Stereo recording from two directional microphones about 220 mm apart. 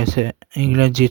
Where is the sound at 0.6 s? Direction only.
45° right (ahead or behind).